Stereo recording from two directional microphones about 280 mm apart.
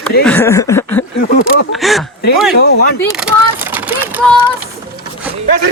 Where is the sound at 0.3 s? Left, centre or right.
Centre.